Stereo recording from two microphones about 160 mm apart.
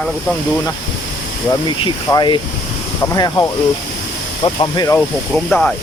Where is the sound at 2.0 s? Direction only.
25° left (ahead or behind).